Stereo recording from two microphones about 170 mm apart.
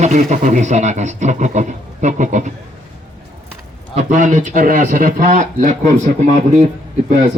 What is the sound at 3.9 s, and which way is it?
Speech, 50° right (ahead or behind).